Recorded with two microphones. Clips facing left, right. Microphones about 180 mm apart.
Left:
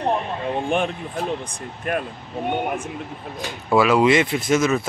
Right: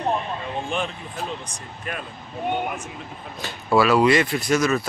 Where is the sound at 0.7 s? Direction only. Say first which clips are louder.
Left 5 dB; 55° left (ahead or behind).